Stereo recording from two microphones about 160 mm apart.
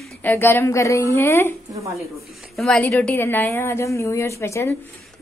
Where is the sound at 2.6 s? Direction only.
5° left (ahead or behind).